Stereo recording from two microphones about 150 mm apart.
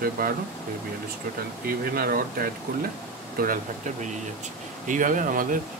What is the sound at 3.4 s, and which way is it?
Speech, 70° right (ahead or behind).